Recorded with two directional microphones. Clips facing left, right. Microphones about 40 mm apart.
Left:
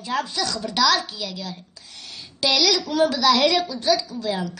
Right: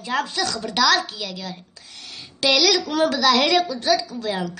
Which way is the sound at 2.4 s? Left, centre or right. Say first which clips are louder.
Right 2 dB; right.